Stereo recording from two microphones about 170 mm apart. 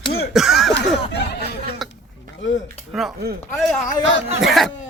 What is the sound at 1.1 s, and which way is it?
Speech, 75° left (ahead or behind).